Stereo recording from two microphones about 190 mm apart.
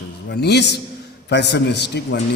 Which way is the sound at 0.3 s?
60° left (ahead or behind).